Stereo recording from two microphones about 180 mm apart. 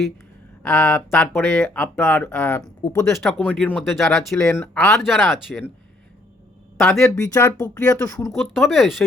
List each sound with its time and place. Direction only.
0.6 s speech: 5° left (ahead or behind)
1.8 s speech: 15° left (ahead or behind)
3.1 s speech: centre (ahead or behind)
6.7 s speech: centre (ahead or behind)
7.2 s speech: 15° left (ahead or behind)
8.5 s speech: centre (ahead or behind)